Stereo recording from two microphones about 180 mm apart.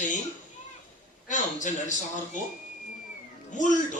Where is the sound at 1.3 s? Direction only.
45° left (ahead or behind).